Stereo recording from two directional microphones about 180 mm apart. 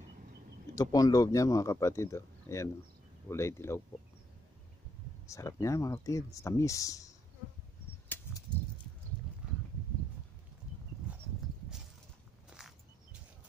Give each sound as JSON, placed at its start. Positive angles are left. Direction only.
{"t": 0.7, "sound": "speech", "side_deg": 20}
{"t": 5.2, "sound": "speech", "side_deg": 15}
{"t": 8.1, "sound": "a sound", "side_deg": 10}
{"t": 11.1, "sound": "horse", "side_deg": -10}
{"t": 12.5, "sound": "walk", "side_deg": -5}